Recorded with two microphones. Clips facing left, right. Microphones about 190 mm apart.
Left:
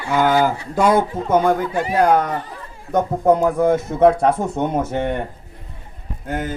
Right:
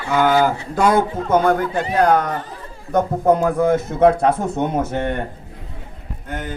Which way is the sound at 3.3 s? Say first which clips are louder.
Left 1 dB; 15° left (ahead or behind).